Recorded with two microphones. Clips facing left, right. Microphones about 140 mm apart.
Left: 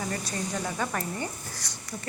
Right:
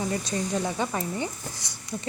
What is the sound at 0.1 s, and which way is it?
Speech, 20° right (ahead or behind).